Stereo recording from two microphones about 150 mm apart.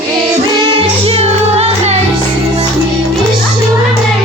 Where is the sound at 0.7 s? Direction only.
35° right (ahead or behind).